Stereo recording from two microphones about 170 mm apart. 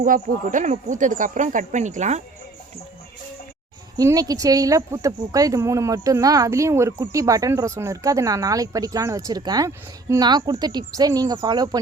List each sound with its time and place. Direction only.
0.0 s speech: 50° right (ahead or behind)
3.9 s speech: 20° right (ahead or behind)